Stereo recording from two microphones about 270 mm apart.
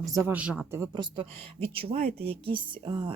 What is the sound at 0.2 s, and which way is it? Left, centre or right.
Speech, centre.